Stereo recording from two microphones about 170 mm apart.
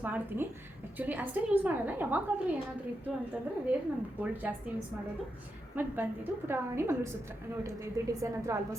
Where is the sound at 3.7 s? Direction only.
10° right (ahead or behind).